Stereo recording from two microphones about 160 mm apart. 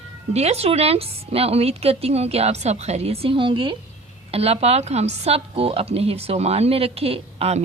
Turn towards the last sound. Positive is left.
turn(degrees=-40)  # may be behind; listen again after turning